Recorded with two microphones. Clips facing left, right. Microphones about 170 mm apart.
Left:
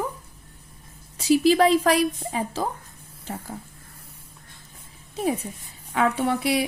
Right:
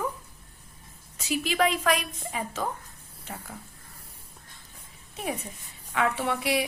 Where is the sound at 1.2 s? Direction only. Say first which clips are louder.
Left 8 dB; 35° left (ahead or behind).